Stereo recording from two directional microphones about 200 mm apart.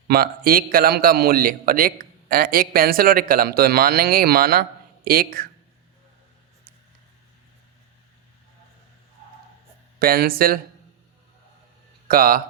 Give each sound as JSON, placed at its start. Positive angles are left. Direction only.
{"t": 0.1, "sound": "a man's voice", "side_deg": -50}
{"t": 10.0, "sound": "a man's voice", "side_deg": -50}
{"t": 12.0, "sound": "a man's voice", "side_deg": -45}